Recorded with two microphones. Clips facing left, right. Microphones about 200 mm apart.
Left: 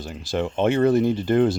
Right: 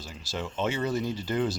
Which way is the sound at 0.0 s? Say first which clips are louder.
Left 10 dB; 55° left (ahead or behind).